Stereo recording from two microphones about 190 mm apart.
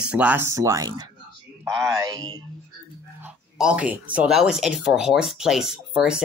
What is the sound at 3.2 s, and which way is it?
Speech, 5° right (ahead or behind).